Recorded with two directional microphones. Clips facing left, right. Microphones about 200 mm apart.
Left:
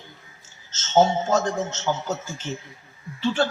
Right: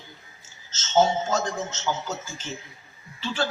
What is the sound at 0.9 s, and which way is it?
A man's voice, 55° left (ahead or behind).